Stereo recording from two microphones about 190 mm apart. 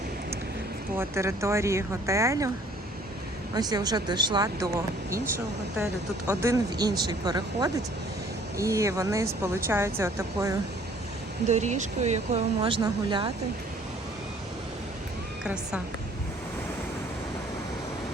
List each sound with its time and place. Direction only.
0.9 s speech: 15° right (ahead or behind)
3.5 s speech: 20° right (ahead or behind)
5.8 s speech: 15° right (ahead or behind)
11.4 s speech: 35° right (ahead or behind)